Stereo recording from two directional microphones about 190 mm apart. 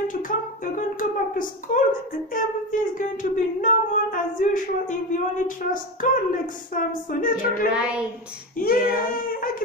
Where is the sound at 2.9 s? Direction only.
45° left (ahead or behind).